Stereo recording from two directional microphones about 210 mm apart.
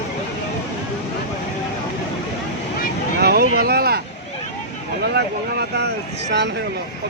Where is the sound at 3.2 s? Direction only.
50° right (ahead or behind).